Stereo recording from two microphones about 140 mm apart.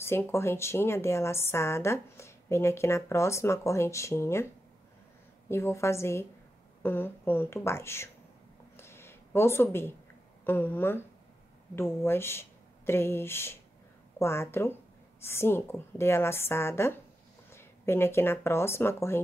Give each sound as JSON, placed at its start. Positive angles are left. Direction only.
{"t": 0.0, "sound": "a woman's voice", "side_deg": 20}
{"t": 5.5, "sound": "a woman's voice", "side_deg": 20}
{"t": 8.7, "sound": "a sound", "side_deg": 15}
{"t": 10.4, "sound": "a woman's voice", "side_deg": 15}